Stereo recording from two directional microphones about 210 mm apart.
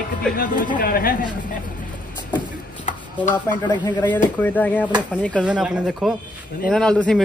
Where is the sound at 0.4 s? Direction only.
40° left (ahead or behind).